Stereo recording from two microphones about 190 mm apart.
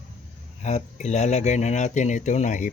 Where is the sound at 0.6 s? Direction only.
35° left (ahead or behind).